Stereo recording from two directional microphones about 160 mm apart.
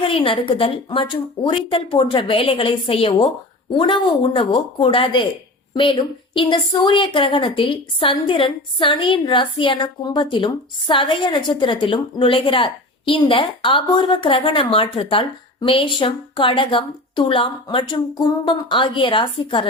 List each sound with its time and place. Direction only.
0.0 s a woman's voice: 35° left (ahead or behind)